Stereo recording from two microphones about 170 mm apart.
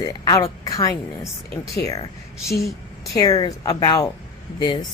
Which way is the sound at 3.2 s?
20° left (ahead or behind).